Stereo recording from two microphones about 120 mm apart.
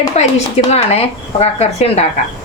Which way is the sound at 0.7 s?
60° left (ahead or behind).